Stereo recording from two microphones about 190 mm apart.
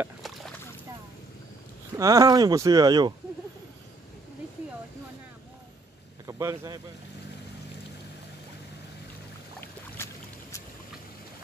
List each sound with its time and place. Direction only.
2.0 s speech: 20° right (ahead or behind)
6.2 s speech: 15° right (ahead or behind)